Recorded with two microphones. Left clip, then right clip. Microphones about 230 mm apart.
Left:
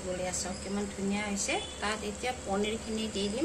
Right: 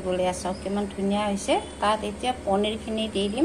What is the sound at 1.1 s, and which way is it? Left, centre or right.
A woman's voice, centre.